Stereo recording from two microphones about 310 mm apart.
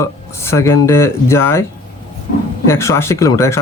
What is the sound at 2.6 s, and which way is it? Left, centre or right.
Speech, centre.